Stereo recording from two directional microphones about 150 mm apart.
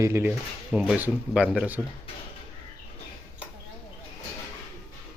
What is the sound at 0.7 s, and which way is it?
Speech, 5° right (ahead or behind).